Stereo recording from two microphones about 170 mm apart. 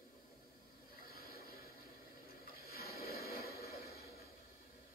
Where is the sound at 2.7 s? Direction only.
65° left (ahead or behind).